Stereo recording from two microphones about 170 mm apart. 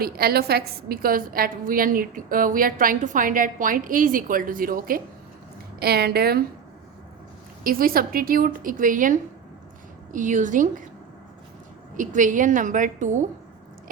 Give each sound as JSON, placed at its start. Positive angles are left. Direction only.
{"t": 0.0, "sound": "a woman's voice", "side_deg": -65}
{"t": 5.8, "sound": "a woman's voice", "side_deg": -70}
{"t": 7.6, "sound": "a woman's voice", "side_deg": -60}
{"t": 11.9, "sound": "a woman's voice", "side_deg": -50}